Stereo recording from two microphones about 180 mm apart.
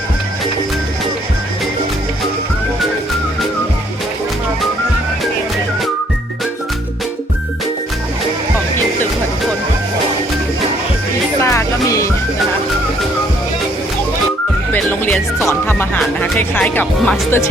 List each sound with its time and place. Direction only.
11.4 s music: 15° left (ahead or behind)
14.7 s music: 10° left (ahead or behind)
16.0 s speech: 5° left (ahead or behind)